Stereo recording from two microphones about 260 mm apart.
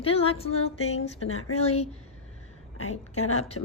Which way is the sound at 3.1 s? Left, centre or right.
Left.